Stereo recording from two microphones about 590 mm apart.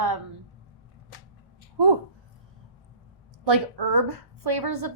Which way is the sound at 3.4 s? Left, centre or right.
Right.